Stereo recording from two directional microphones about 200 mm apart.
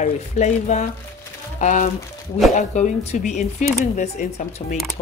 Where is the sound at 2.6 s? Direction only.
35° left (ahead or behind).